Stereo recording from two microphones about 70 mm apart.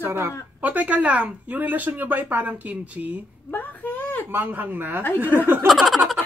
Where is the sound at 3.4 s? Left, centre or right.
Left.